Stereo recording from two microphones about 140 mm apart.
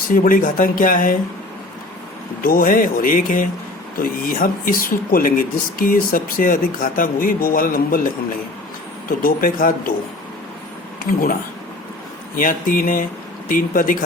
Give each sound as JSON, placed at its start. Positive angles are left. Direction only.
{"t": 0.1, "sound": "speech", "side_deg": 80}
{"t": 2.4, "sound": "speech", "side_deg": 90}
{"t": 4.0, "sound": "speech", "side_deg": 90}
{"t": 9.0, "sound": "speech", "side_deg": 85}
{"t": 11.0, "sound": "speech", "side_deg": 90}
{"t": 12.4, "sound": "speech", "side_deg": 80}